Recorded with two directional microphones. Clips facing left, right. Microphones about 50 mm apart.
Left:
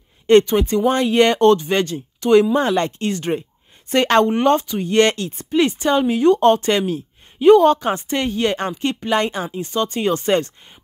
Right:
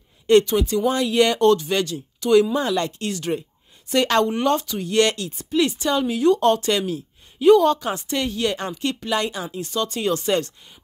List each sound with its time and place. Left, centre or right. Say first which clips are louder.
0.3 s speech: left 3 dB; left